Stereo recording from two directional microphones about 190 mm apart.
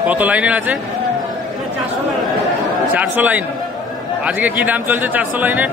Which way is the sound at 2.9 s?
10° right (ahead or behind).